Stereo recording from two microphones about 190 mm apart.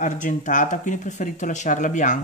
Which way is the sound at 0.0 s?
40° left (ahead or behind).